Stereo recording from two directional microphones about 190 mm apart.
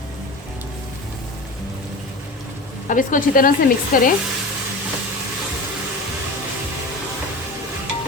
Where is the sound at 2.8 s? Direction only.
45° left (ahead or behind).